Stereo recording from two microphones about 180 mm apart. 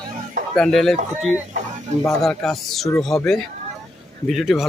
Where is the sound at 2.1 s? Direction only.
Centre (ahead or behind).